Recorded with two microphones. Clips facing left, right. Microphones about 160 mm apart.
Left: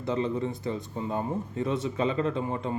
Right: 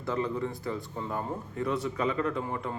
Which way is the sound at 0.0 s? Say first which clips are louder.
Left 2 dB; 20° left (ahead or behind).